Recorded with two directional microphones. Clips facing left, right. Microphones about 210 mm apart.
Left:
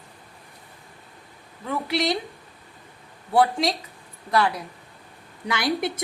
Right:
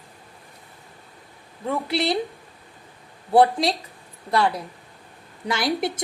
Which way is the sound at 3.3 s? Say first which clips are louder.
Right 3 dB; 35° right (ahead or behind).